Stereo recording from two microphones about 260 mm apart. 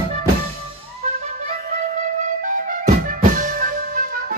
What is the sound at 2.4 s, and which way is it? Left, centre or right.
Music, right.